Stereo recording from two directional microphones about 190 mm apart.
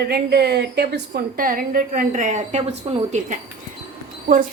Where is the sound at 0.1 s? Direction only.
60° right (ahead or behind); by 3.0 s 30° right (ahead or behind).